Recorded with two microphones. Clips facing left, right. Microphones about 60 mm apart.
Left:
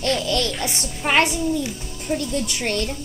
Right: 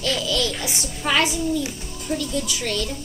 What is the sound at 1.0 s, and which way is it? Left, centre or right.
A woman's voice, left.